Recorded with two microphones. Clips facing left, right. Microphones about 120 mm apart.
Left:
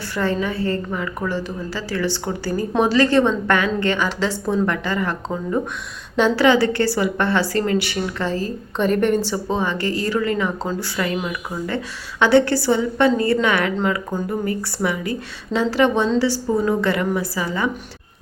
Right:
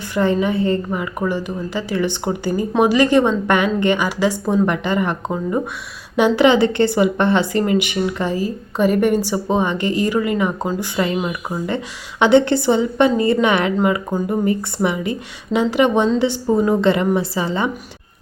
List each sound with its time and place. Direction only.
0.1 s a woman's voice: 15° right (ahead or behind)